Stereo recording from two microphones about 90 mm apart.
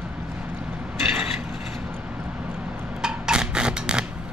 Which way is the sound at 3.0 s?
10° right (ahead or behind).